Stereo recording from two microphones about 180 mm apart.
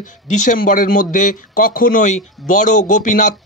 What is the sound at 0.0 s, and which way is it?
Speech, 45° left (ahead or behind).